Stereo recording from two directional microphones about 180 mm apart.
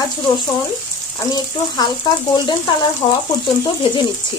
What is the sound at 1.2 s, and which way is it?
Speech, 20° left (ahead or behind).